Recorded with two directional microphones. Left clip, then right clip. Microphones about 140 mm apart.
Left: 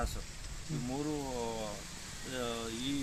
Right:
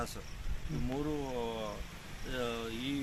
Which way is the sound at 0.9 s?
10° left (ahead or behind).